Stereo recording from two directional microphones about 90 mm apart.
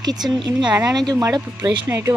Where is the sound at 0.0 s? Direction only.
50° right (ahead or behind).